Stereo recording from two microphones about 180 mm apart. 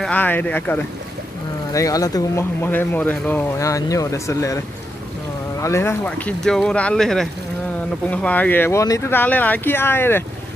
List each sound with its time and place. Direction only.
0.0 s speech: 10° left (ahead or behind)